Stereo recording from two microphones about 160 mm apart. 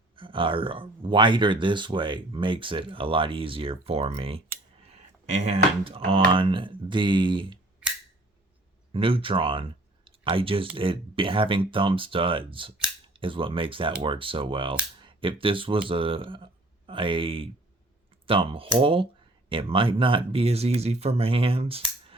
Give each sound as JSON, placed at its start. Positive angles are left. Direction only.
{"t": 0.2, "sound": "speech", "side_deg": -30}
{"t": 8.9, "sound": "speech", "side_deg": -35}